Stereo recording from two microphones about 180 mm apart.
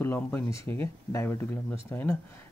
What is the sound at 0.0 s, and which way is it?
Speech, 10° left (ahead or behind).